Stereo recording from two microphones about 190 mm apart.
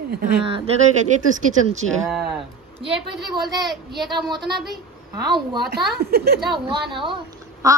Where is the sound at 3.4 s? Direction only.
Centre (ahead or behind).